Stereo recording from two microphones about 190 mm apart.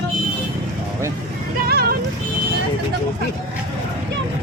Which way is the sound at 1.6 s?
55° right (ahead or behind).